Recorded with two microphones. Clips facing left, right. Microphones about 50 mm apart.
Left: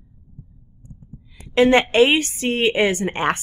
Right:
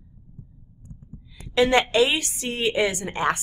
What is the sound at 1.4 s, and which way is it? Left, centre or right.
Speech, left.